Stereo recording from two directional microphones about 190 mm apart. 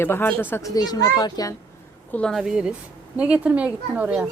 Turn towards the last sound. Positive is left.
turn(degrees=-5)  # may be behind; listen again after turning